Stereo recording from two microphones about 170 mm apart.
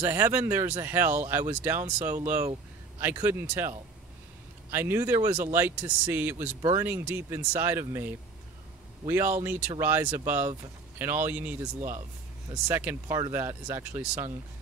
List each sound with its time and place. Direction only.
0.0 s speech: 15° right (ahead or behind)